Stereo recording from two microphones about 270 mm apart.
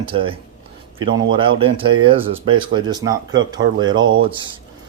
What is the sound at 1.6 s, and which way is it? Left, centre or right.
Speech, centre.